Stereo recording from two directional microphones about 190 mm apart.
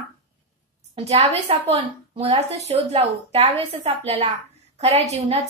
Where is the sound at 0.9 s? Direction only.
35° right (ahead or behind).